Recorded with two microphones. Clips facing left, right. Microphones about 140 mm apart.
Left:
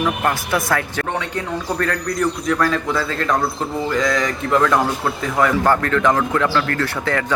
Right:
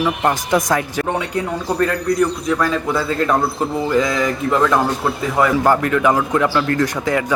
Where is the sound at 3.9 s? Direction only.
5° right (ahead or behind).